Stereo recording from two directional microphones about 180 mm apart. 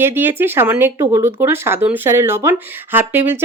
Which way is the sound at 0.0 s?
10° right (ahead or behind).